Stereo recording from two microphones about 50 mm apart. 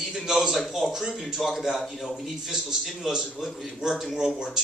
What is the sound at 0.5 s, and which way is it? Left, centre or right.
A man's voice, centre.